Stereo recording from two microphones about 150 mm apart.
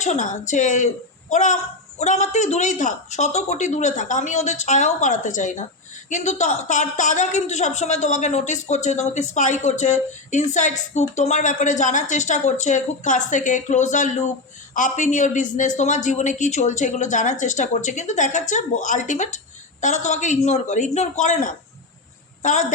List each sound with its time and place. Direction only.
0.0 s a woman's voice: 55° left (ahead or behind)